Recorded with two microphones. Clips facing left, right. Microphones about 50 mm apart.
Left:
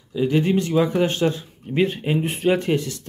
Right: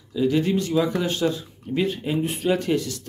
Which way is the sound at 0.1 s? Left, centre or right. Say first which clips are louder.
Left 2 dB; left.